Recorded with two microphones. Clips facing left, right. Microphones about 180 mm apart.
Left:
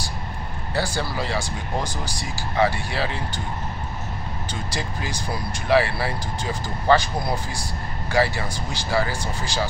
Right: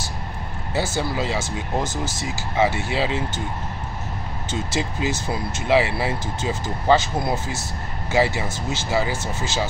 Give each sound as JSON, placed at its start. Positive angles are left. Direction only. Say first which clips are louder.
{"t": 0.7, "sound": "speech", "louder": "right 2 dB", "side_deg": -20}
{"t": 4.5, "sound": "speech", "louder": "right 6 dB", "side_deg": -20}